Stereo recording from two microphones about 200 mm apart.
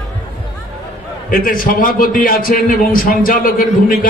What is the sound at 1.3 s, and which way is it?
A man's voice, 45° left (ahead or behind).